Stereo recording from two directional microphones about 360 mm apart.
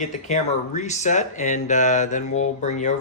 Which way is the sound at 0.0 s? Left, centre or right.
Centre.